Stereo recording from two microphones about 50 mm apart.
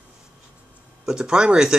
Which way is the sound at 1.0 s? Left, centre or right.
Centre.